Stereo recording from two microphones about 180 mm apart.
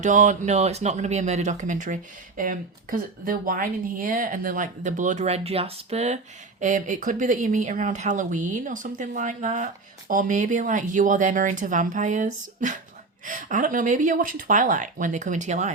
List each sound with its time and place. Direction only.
0.0 s speech: 45° right (ahead or behind)